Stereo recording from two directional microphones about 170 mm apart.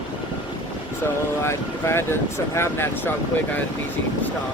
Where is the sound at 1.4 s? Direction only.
15° left (ahead or behind).